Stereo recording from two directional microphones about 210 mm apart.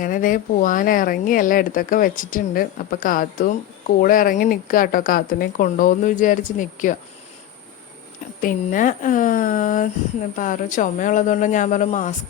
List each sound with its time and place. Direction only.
0.0 s speech: 40° left (ahead or behind)
8.4 s speech: 40° left (ahead or behind)